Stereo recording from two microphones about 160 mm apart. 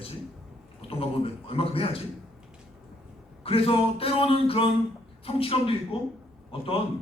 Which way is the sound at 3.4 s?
35° left (ahead or behind).